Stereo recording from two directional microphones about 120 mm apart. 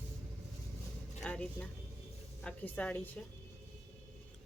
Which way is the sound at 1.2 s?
10° left (ahead or behind).